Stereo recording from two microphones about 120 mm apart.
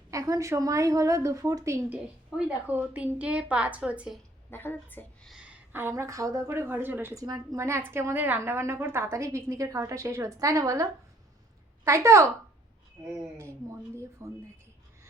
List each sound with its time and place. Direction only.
0.1 s a woman's voice: 30° right (ahead or behind)
1.9 s a woman's voice: 15° right (ahead or behind)
4.5 s a woman's voice: 15° left (ahead or behind)
5.2 s a woman's voice: 5° right (ahead or behind)
7.2 s a woman's voice: 30° right (ahead or behind)
11.9 s a woman's voice: 25° right (ahead or behind)
13.3 s a woman's voice: 25° right (ahead or behind)